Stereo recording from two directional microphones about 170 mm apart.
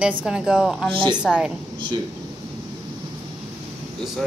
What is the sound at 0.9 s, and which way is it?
Speech, 30° right (ahead or behind).